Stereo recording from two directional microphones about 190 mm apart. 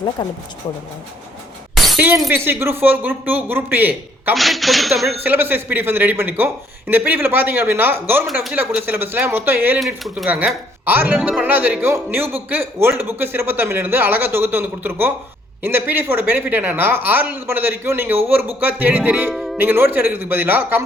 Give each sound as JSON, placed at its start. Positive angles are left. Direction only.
{"t": 0.2, "sound": "speech", "side_deg": 20}
{"t": 1.7, "sound": "shatter", "side_deg": 0}
{"t": 2.2, "sound": "speech", "side_deg": -10}
{"t": 5.2, "sound": "speech", "side_deg": -10}
{"t": 9.8, "sound": "speech", "side_deg": 0}
{"t": 19.6, "sound": "speech", "side_deg": -10}